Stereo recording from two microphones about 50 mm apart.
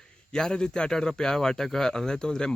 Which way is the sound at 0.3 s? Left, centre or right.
Centre.